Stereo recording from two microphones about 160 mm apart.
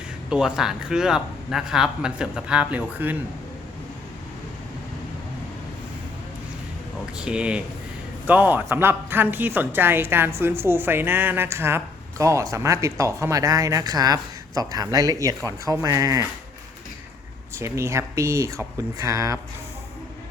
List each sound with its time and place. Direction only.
0.3 s speech: 5° right (ahead or behind)
7.2 s a woman's voice: 5° right (ahead or behind)
17.6 s speech: 15° right (ahead or behind)